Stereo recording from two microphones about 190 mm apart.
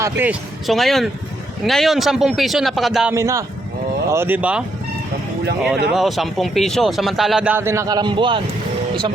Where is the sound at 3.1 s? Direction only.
15° right (ahead or behind).